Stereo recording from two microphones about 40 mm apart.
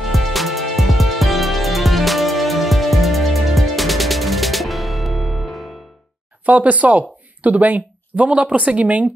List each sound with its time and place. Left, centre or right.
0.1 s music: centre
6.4 s speech: right